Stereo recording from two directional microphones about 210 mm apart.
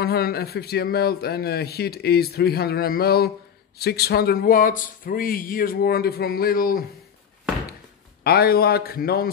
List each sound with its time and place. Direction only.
0.0 s speech: 50° left (ahead or behind)
8.2 s speech: 50° left (ahead or behind)